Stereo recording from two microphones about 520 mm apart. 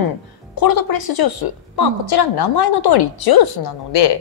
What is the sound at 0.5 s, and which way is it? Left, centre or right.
A woman's voice, left.